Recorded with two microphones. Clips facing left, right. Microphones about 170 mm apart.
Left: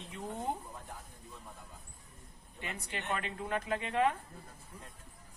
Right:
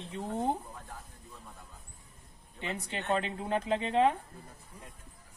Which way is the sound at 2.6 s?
25° right (ahead or behind).